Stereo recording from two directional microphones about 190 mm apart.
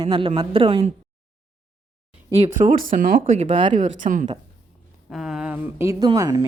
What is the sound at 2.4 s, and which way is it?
A woman's voice, 35° right (ahead or behind).